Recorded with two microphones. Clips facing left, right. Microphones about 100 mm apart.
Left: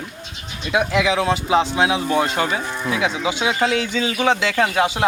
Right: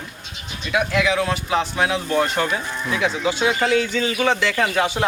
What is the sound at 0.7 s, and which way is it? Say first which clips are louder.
A man's voice: left 1 dB; 20° left (ahead or behind).